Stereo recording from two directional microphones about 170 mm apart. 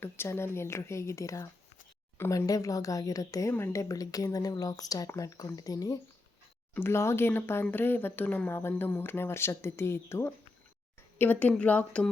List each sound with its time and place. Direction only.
0.0 s speech: 15° left (ahead or behind)